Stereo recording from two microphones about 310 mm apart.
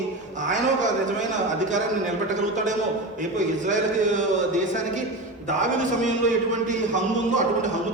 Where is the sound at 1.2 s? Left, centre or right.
Right.